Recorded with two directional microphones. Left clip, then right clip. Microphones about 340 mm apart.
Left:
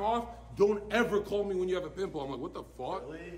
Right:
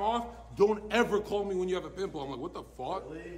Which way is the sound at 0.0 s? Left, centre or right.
Centre.